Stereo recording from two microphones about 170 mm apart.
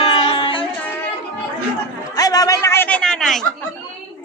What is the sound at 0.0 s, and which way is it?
Music, 30° left (ahead or behind).